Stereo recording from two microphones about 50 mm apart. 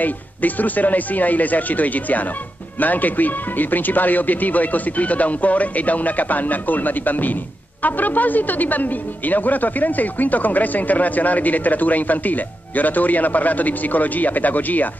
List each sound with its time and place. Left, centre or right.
0.0 s speech: left